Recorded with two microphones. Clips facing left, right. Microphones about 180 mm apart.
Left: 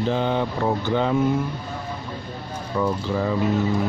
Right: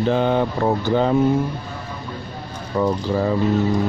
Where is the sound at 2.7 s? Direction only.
40° right (ahead or behind).